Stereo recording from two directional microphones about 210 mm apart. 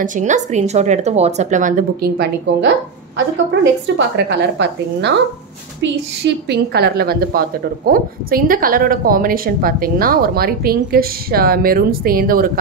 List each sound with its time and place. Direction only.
0.0 s speech: 35° right (ahead or behind)
3.8 s a woman's voice: 55° right (ahead or behind)